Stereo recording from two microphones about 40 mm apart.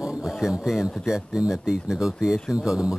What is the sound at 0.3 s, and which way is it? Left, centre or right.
Speech, centre.